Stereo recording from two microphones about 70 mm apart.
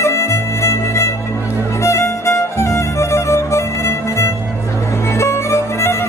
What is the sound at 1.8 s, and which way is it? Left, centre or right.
Violin, left.